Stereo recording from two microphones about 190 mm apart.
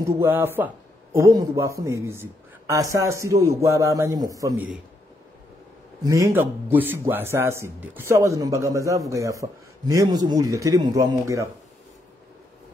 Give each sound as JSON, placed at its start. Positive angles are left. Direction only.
{"t": 0.0, "sound": "a man's voice", "side_deg": -15}
{"t": 6.0, "sound": "a man's voice", "side_deg": -15}